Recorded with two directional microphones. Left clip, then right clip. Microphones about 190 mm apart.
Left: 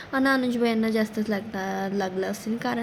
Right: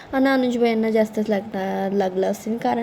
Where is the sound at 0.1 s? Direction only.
5° right (ahead or behind).